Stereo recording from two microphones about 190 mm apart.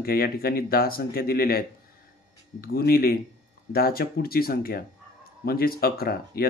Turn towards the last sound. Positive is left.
turn(degrees=50)  # may be behind; listen again after turning